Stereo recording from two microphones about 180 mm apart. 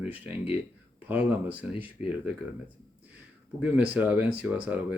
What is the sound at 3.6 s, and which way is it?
Speech, 10° right (ahead or behind).